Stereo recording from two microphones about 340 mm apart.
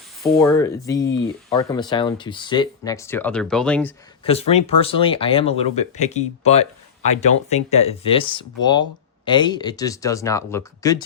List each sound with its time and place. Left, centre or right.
0.3 s speech: centre
1.0 s speech: left
1.5 s speech: centre
4.2 s speech: centre